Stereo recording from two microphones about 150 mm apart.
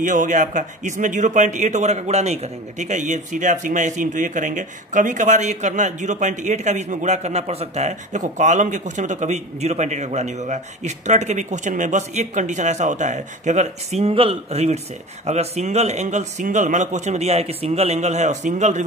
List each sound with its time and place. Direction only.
0.0 s a man's voice: 55° right (ahead or behind)